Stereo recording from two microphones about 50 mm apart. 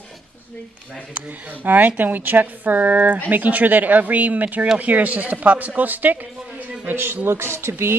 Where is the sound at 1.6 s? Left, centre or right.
Right.